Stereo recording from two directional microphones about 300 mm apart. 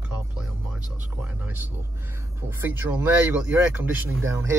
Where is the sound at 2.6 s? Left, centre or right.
Centre.